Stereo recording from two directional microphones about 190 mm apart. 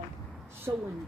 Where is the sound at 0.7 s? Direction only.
15° right (ahead or behind).